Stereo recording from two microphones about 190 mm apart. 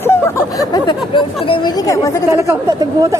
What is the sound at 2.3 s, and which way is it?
Speech, 15° right (ahead or behind).